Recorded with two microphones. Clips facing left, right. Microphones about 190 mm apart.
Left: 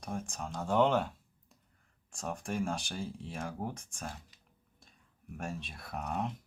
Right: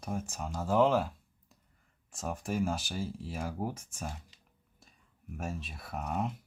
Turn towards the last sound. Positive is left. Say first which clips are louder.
# right 1 dB
turn(degrees=0)  # may be behind; listen again after turning